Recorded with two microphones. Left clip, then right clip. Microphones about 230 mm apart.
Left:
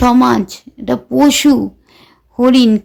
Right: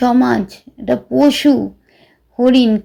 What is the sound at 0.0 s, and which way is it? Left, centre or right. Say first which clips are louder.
A woman's voice: left 3 dB; centre.